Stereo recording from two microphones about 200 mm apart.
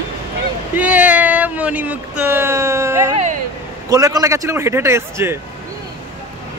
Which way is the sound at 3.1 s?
35° right (ahead or behind).